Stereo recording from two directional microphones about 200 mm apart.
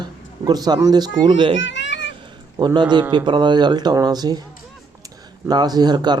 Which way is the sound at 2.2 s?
20° right (ahead or behind).